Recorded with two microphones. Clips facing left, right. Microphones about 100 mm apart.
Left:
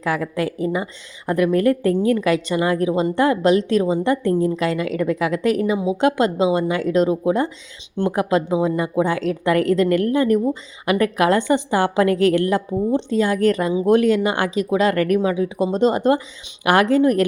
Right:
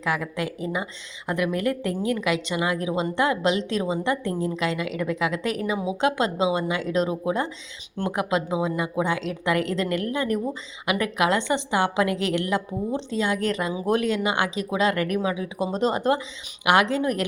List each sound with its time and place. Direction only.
0.0 s a woman's voice: 35° left (ahead or behind)
4.2 s speech: 30° right (ahead or behind)
4.8 s a woman's voice: 35° left (ahead or behind)